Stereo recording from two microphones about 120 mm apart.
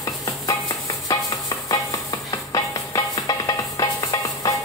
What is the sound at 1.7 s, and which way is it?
Music, 30° left (ahead or behind).